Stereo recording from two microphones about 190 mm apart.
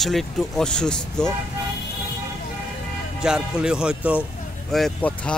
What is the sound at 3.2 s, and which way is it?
Speech, 5° right (ahead or behind).